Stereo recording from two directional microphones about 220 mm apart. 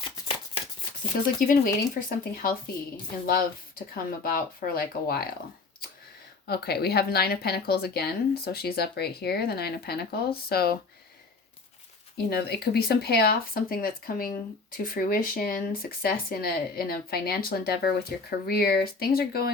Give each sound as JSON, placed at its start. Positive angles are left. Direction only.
{"t": 1.4, "sound": "speech", "side_deg": 40}
{"t": 3.9, "sound": "speech", "side_deg": 40}
{"t": 6.5, "sound": "speech", "side_deg": 45}
{"t": 12.1, "sound": "speech", "side_deg": 45}